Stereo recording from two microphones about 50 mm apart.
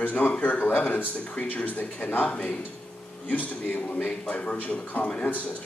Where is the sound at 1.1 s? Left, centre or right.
Left.